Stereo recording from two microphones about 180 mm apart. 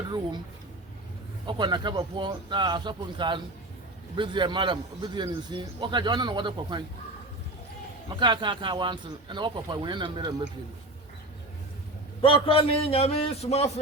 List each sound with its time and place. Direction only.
1.5 s a man's voice: 25° right (ahead or behind)
8.1 s a man's voice: 25° right (ahead or behind)
12.2 s a man's voice: 30° left (ahead or behind)